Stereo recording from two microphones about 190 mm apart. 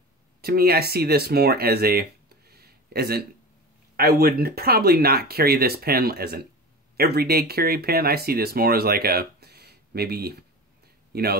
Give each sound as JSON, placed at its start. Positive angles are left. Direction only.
{"t": 0.4, "sound": "speech", "side_deg": -55}